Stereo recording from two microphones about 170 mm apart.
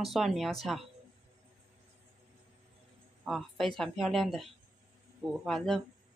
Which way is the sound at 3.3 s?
Centre (ahead or behind).